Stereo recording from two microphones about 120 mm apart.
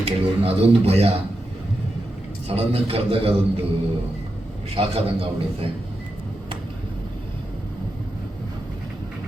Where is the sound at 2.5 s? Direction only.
55° right (ahead or behind).